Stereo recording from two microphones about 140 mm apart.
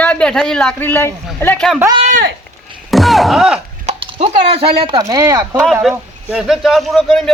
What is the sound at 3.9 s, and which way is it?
Speech, 45° right (ahead or behind).